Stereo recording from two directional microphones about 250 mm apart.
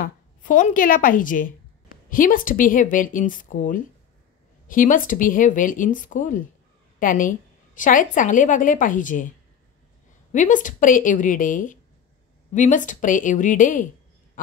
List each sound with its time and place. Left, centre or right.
0.0 s a woman's voice: left
10.3 s a woman's voice: left